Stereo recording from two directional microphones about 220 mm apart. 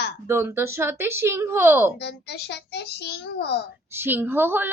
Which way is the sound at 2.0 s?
50° left (ahead or behind).